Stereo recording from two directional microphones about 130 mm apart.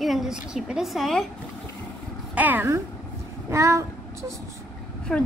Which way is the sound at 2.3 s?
15° right (ahead or behind).